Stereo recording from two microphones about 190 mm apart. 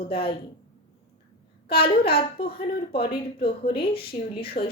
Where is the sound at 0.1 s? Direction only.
55° left (ahead or behind).